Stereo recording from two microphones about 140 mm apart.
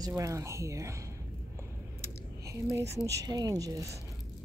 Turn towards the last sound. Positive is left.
turn(degrees=-25)  # may be behind; listen again after turning